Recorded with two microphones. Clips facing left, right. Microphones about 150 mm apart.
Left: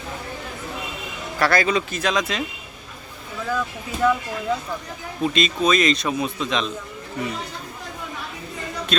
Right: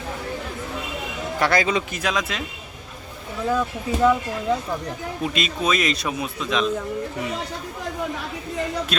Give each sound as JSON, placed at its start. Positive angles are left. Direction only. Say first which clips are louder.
{"t": 1.4, "sound": "speech", "louder": "left 1 dB", "side_deg": -20}
{"t": 3.4, "sound": "speech", "louder": "right 4 dB", "side_deg": -25}
{"t": 5.2, "sound": "speech", "louder": "left 4 dB", "side_deg": -5}
{"t": 8.9, "sound": "speech", "louder": "left 6 dB", "side_deg": -10}